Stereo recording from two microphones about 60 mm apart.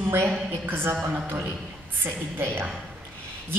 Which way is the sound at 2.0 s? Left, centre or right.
Right.